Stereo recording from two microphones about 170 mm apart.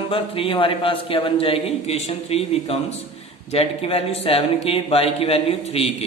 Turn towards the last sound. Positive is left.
turn(degrees=35)  # may be behind; listen again after turning